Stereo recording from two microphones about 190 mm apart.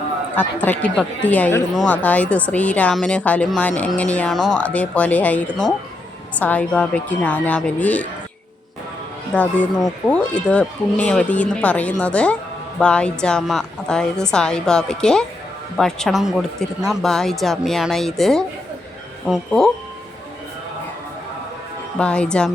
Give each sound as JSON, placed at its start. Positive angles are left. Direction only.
{"t": 0.3, "sound": "speech", "side_deg": 10}
{"t": 9.3, "sound": "speech", "side_deg": 5}
{"t": 21.9, "sound": "speech", "side_deg": 5}